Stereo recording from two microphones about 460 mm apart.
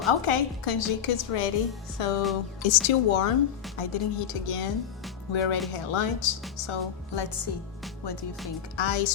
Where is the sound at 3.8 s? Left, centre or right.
Left.